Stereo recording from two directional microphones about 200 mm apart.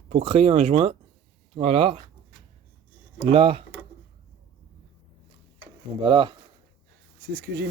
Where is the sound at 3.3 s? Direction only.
30° right (ahead or behind).